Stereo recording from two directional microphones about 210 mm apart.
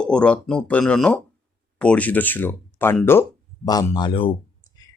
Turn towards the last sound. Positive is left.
turn(degrees=25)  # may be behind; listen again after turning